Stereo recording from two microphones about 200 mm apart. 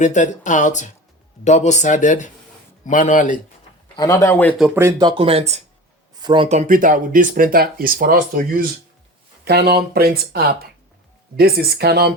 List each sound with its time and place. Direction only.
0.0 s speech: 35° left (ahead or behind)
3.9 s speech: 15° left (ahead or behind)
4.5 s speech: 5° right (ahead or behind); by 12.1 s 50° right (ahead or behind)